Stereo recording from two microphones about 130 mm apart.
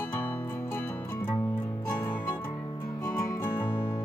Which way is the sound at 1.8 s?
20° left (ahead or behind).